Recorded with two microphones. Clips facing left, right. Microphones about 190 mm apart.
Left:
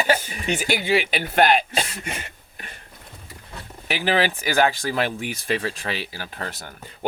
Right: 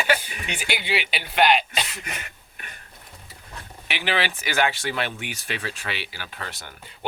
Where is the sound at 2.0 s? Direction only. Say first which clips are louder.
Left 4 dB; 30° left (ahead or behind).